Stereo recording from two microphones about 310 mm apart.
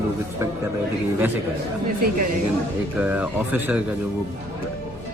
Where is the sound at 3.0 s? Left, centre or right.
Centre.